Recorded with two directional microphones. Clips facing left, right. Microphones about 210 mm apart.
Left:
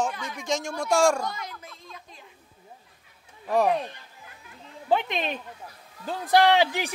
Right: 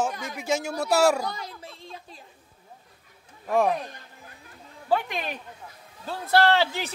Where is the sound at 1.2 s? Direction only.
35° right (ahead or behind).